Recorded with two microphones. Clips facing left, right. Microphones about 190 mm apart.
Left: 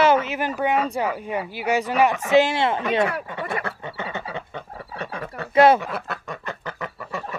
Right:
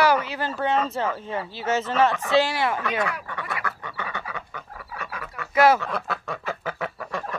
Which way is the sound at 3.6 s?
25° left (ahead or behind).